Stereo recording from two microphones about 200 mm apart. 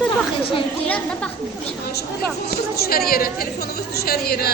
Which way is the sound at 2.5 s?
50° left (ahead or behind).